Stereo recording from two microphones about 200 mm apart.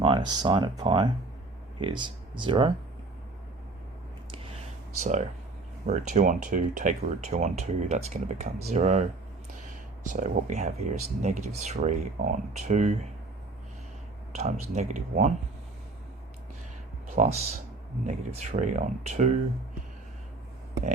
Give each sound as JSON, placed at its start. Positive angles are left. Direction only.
{"t": 0.0, "sound": "speech", "side_deg": -25}
{"t": 4.9, "sound": "speech", "side_deg": -35}
{"t": 10.1, "sound": "speech", "side_deg": -40}
{"t": 14.3, "sound": "speech", "side_deg": -35}
{"t": 17.2, "sound": "speech", "side_deg": -30}